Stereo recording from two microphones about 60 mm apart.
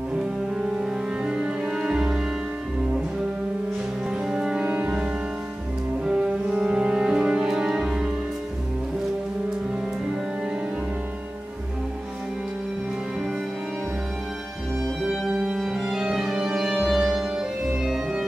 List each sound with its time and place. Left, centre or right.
0.6 s music: centre
4.3 s music: centre
4.6 s music: right; by 8.1 s centre
15.0 s music: centre
16.7 s organ: centre